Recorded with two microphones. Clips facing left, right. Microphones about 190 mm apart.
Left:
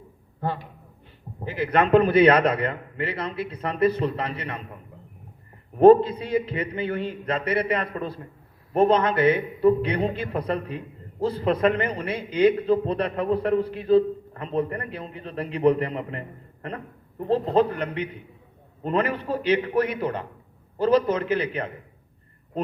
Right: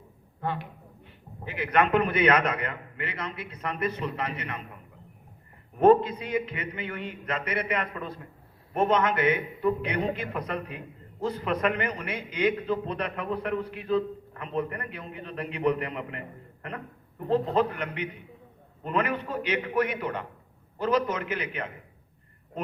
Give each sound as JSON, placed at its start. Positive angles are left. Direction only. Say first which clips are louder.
{"t": 0.4, "sound": "a man's voice", "louder": "left 3 dB", "side_deg": 35}
{"t": 5.8, "sound": "a man's voice", "louder": "left 6 dB", "side_deg": 30}